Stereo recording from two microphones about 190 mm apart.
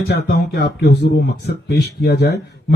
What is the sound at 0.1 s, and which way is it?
Speech, 60° left (ahead or behind).